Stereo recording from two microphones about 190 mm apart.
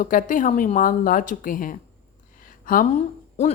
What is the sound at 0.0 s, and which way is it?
A woman's voice, 45° left (ahead or behind).